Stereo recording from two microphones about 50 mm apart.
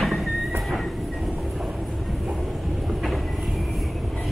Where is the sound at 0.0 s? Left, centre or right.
Centre.